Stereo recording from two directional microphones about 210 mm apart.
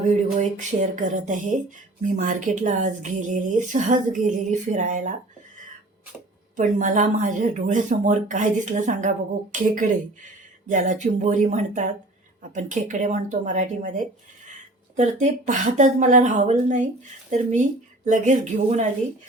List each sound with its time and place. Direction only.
0.0 s a sound: 35° right (ahead or behind)
2.1 s speech: 35° right (ahead or behind)
6.6 s speech: 40° right (ahead or behind)
18.0 s speech: 35° right (ahead or behind)